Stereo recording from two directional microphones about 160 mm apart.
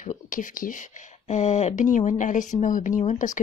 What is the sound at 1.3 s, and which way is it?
Speech, 45° left (ahead or behind).